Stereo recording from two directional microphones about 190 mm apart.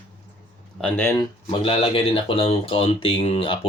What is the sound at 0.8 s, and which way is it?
Speech, 10° left (ahead or behind).